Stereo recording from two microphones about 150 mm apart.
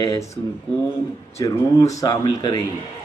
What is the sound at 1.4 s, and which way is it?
A man's voice, 20° left (ahead or behind).